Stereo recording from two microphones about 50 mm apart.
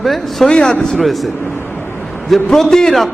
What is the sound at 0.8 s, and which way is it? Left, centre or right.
Speech, centre.